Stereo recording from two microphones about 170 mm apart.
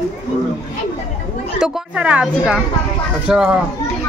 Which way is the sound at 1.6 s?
5° right (ahead or behind).